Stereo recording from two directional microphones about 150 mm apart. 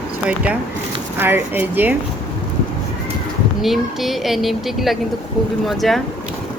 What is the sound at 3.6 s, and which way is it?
A woman's voice, centre (ahead or behind).